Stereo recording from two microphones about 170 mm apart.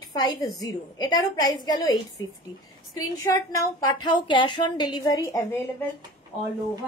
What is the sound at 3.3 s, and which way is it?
A woman's voice, 20° left (ahead or behind).